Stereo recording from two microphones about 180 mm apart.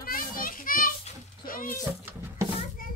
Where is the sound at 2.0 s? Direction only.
10° right (ahead or behind).